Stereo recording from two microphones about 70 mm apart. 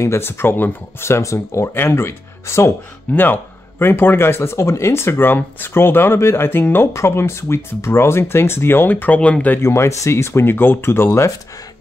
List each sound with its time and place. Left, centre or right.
0.0 s speech: left
1.7 s speech: left
3.1 s speech: left
3.8 s speech: left
6.9 s speech: left
8.9 s speech: left
9.6 s speech: left